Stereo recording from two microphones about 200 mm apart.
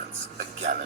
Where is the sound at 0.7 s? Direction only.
45° right (ahead or behind).